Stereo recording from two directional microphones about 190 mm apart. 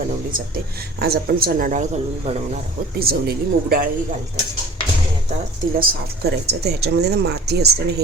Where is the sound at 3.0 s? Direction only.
50° right (ahead or behind).